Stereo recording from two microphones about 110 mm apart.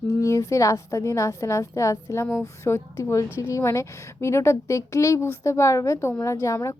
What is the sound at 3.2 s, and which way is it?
Speech, 15° right (ahead or behind).